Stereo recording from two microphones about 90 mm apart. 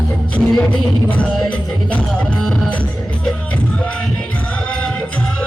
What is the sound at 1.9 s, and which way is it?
Music, 10° left (ahead or behind).